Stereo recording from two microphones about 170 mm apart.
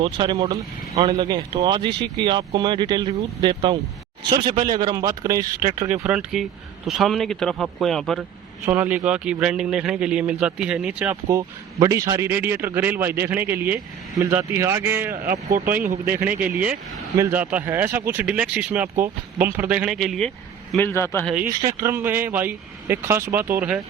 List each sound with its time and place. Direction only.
0.0 s speech: 30° right (ahead or behind)
6.0 s speech: 5° right (ahead or behind)
8.6 s speech: 10° right (ahead or behind)
15.1 s speech: 60° right (ahead or behind)
16.4 s speech: 10° right (ahead or behind)
20.7 s a man's voice: 15° left (ahead or behind)
21.4 s speech: 50° right (ahead or behind)
21.8 s speech: 15° right (ahead or behind)